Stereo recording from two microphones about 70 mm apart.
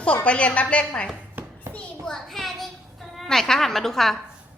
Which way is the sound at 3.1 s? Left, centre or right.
Centre.